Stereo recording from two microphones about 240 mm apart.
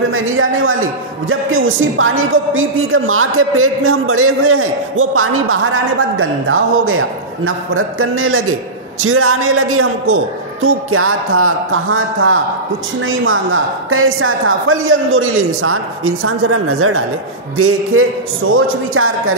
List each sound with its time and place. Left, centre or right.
0.1 s speech: right